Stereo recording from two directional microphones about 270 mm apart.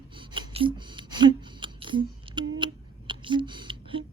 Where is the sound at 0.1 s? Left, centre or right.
Centre.